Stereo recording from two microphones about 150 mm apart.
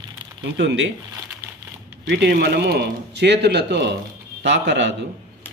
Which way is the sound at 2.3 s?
90° right.